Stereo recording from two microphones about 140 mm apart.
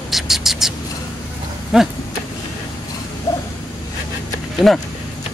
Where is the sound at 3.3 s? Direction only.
25° left (ahead or behind).